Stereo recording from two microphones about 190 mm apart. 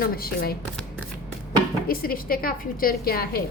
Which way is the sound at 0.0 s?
50° left (ahead or behind).